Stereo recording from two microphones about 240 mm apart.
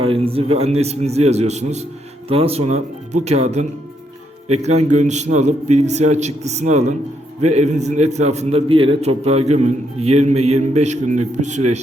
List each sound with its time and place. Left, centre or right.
0.0 s a man's voice: right
4.9 s a man's voice: right